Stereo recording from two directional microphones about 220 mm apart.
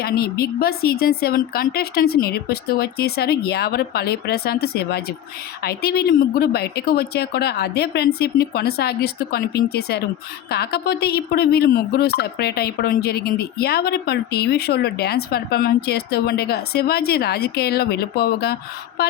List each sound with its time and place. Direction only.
0.0 s speech: 45° left (ahead or behind)